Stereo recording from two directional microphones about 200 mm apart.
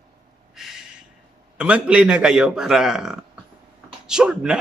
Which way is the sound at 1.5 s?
5° right (ahead or behind).